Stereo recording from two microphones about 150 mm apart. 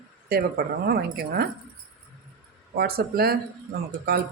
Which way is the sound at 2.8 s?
90° right.